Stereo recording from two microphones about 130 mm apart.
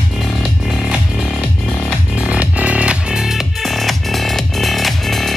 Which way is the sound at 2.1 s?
10° right (ahead or behind).